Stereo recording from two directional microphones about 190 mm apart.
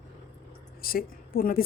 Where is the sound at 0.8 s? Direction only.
50° left (ahead or behind).